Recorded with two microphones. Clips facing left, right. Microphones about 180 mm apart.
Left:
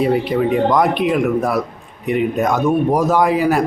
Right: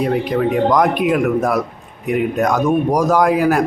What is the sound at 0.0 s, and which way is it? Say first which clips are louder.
Speech: left 1 dB; centre (ahead or behind).